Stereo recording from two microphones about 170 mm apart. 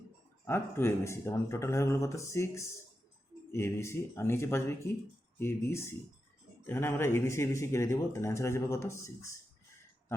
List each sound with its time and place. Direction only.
0.4 s speech: 15° left (ahead or behind)